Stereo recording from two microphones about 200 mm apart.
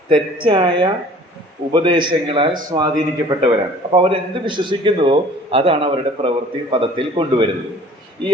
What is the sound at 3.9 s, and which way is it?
A man's voice, 25° right (ahead or behind).